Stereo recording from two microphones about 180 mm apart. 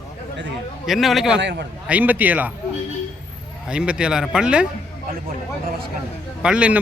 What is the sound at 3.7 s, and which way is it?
Speech, 5° right (ahead or behind).